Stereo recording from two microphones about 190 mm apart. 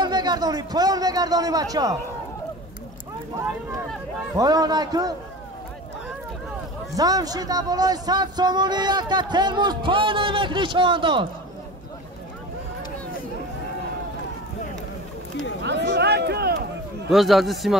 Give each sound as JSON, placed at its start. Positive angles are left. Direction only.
{"t": 0.0, "sound": "speech", "side_deg": -20}
{"t": 4.4, "sound": "speech", "side_deg": -20}
{"t": 7.0, "sound": "speech", "side_deg": -20}
{"t": 15.6, "sound": "a sound", "side_deg": -65}
{"t": 17.1, "sound": "a man's voice", "side_deg": 0}